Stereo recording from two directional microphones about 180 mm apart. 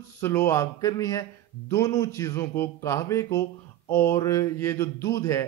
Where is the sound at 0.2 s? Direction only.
10° left (ahead or behind).